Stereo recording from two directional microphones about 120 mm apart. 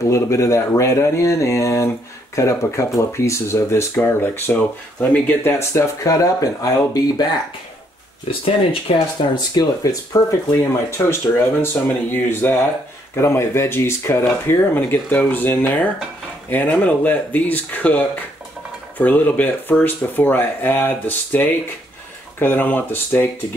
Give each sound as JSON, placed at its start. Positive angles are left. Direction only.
{"t": 0.1, "sound": "speech", "side_deg": 25}
{"t": 8.3, "sound": "speech", "side_deg": 50}
{"t": 10.6, "sound": "speech", "side_deg": 25}